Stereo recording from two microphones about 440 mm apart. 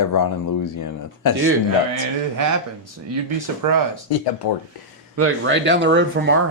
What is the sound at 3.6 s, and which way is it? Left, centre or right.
Speech, right.